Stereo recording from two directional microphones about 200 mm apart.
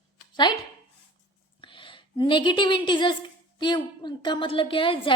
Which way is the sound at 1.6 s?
25° left (ahead or behind).